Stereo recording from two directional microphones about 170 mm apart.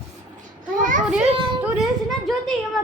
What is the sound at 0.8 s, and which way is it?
Speech, 50° right (ahead or behind).